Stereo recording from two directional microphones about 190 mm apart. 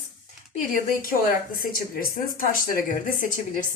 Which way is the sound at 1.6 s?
50° left (ahead or behind).